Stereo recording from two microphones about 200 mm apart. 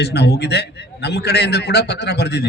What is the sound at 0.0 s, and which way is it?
A man's voice, 55° left (ahead or behind).